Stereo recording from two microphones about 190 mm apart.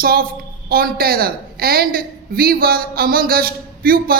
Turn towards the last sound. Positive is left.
turn(degrees=-50)  # may be behind; listen again after turning